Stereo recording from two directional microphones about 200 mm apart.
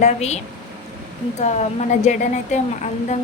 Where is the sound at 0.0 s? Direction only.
35° left (ahead or behind).